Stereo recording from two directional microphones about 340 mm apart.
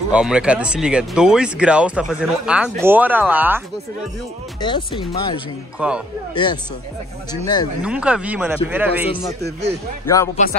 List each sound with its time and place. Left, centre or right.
0.1 s speech: centre
4.6 s speech: centre
5.8 s speech: centre
6.3 s speech: centre
7.8 s speech: centre
10.0 s speech: centre